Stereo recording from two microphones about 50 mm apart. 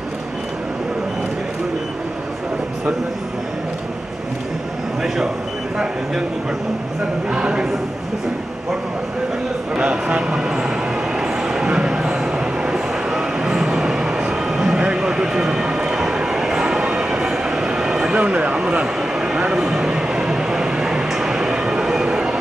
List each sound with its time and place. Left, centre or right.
5.0 s a sound: centre
7.2 s speech: centre
9.8 s a sound: right
11.1 s train: centre
18.2 s speech: right
19.1 s vehicle: centre